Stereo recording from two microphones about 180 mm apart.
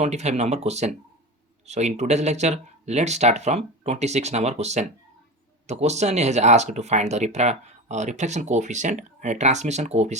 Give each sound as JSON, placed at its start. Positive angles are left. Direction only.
{"t": 0.0, "sound": "speech", "side_deg": -40}